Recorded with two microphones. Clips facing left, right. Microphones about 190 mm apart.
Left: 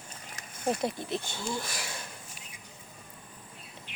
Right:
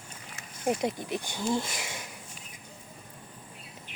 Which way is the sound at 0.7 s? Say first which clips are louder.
Right 1 dB; 15° right (ahead or behind).